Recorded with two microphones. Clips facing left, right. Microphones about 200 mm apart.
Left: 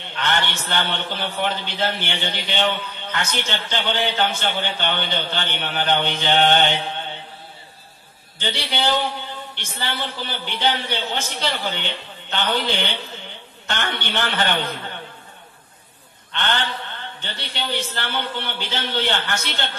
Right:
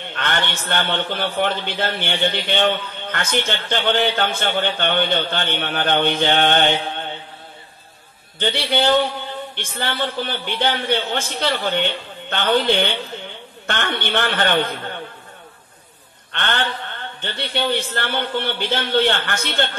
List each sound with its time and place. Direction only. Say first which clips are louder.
0.1 s a man's voice: even; 55° right (ahead or behind)
8.4 s a man's voice: right 5 dB; 55° right (ahead or behind)
16.3 s a man's voice: right 1 dB; 55° right (ahead or behind)